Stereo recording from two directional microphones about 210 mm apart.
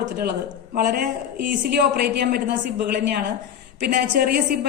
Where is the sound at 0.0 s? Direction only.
50° right (ahead or behind).